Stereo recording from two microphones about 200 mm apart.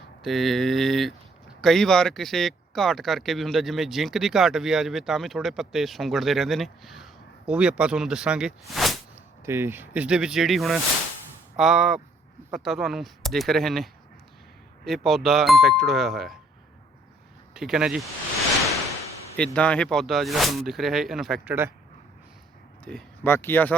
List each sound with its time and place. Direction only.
0.2 s speech: centre (ahead or behind)
8.7 s a sound: centre (ahead or behind)
9.5 s speech: 10° right (ahead or behind)
17.5 s speech: centre (ahead or behind)
19.4 s speech: 5° left (ahead or behind)
22.8 s speech: 5° left (ahead or behind)